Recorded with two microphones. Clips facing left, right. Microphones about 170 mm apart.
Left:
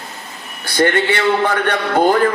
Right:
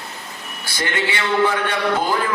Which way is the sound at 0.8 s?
55° left (ahead or behind).